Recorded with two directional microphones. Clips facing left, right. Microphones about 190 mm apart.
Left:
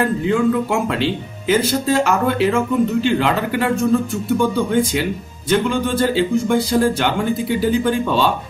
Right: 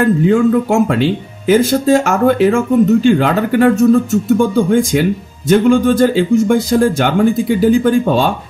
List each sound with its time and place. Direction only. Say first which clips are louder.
0.3 s speech: right 5 dB; 45° right (ahead or behind)